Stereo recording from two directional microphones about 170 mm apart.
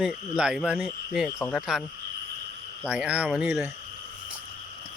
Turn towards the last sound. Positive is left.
turn(degrees=-5)  # may be behind; listen again after turning